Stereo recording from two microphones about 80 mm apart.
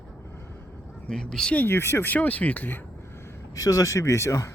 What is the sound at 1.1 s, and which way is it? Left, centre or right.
Speech, centre.